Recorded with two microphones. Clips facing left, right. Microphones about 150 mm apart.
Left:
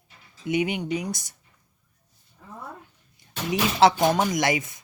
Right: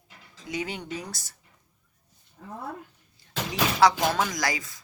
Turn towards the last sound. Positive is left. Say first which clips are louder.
# left 6 dB
turn(degrees=20)  # may be behind; listen again after turning